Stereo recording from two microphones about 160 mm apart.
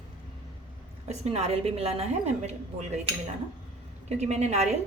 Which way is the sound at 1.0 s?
40° right (ahead or behind).